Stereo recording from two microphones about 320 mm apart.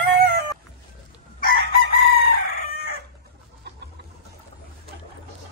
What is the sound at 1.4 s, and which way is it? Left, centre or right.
Chicken, left.